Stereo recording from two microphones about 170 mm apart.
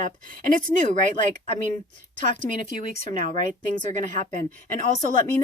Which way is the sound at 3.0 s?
50° right (ahead or behind).